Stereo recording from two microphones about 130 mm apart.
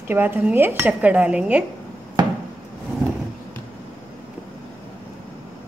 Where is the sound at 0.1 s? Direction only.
15° right (ahead or behind).